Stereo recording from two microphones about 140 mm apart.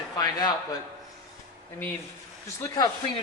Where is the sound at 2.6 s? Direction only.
30° left (ahead or behind).